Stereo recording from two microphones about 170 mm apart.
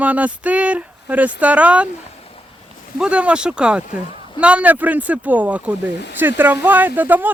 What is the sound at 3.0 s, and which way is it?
Speech, 5° right (ahead or behind).